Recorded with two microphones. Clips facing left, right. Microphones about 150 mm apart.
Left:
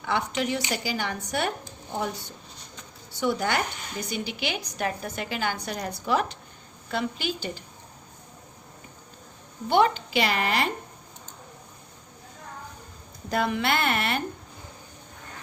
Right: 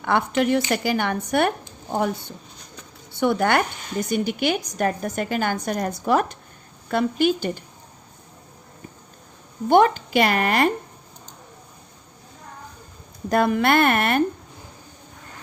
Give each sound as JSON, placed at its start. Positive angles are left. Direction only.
{"t": 0.0, "sound": "a woman's voice", "side_deg": -55}
{"t": 9.6, "sound": "a woman's voice", "side_deg": -50}
{"t": 13.3, "sound": "a woman's voice", "side_deg": -50}